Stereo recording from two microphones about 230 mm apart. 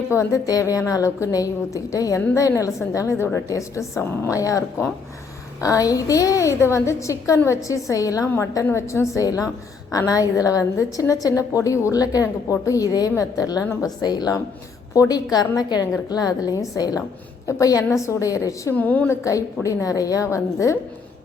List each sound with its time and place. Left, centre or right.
0.1 s a woman's voice: centre